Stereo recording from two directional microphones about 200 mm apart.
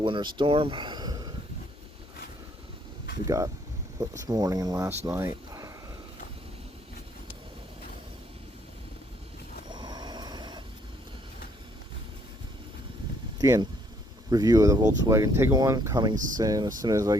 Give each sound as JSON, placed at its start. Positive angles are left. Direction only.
{"t": 0.0, "sound": "speech", "side_deg": -25}
{"t": 3.2, "sound": "speech", "side_deg": -15}
{"t": 9.7, "sound": "vehicle", "side_deg": -20}
{"t": 13.4, "sound": "speech", "side_deg": -20}
{"t": 16.1, "sound": "speech", "side_deg": -40}
{"t": 16.4, "sound": "speech", "side_deg": -20}